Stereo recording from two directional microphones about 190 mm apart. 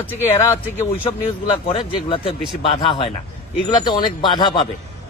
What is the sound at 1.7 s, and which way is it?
Speech, 30° left (ahead or behind).